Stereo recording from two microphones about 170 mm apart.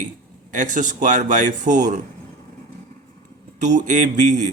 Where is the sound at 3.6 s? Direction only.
45° right (ahead or behind).